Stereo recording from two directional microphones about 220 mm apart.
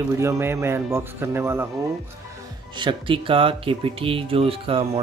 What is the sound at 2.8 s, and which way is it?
Speech, 20° right (ahead or behind).